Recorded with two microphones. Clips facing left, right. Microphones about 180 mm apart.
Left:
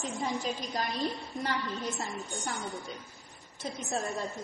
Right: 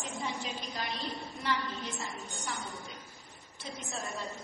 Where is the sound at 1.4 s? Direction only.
45° left (ahead or behind).